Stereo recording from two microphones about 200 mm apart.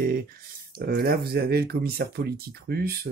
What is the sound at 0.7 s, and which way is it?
Speech, 50° right (ahead or behind).